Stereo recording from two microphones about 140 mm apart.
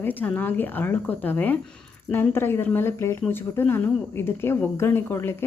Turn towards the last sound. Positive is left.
turn(degrees=15)  # may be behind; listen again after turning